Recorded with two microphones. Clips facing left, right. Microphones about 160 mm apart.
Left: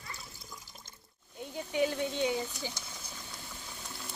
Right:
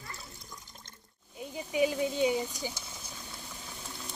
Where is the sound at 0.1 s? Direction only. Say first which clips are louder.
Right 1 dB; 5° left (ahead or behind).